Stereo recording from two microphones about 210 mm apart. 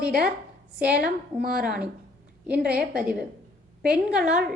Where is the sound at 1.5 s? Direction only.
5° right (ahead or behind).